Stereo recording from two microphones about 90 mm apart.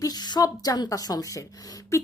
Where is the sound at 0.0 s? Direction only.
50° left (ahead or behind).